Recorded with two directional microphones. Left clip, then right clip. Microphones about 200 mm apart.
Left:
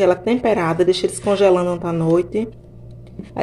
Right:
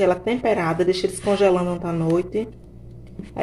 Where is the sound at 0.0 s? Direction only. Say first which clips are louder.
Left 3 dB; 15° left (ahead or behind).